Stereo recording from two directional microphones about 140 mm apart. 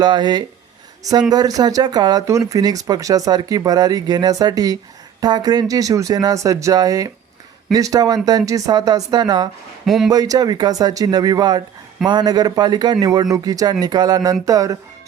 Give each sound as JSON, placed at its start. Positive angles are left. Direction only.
{"t": 0.0, "sound": "speech", "side_deg": -30}
{"t": 9.8, "sound": "a man's voice", "side_deg": 0}
{"t": 10.1, "sound": "speech", "side_deg": -25}